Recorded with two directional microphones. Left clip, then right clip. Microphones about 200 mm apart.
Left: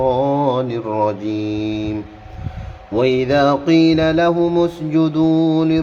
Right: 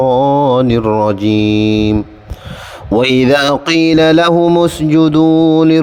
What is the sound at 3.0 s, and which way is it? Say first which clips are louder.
Mantra: right 4 dB; 60° right (ahead or behind).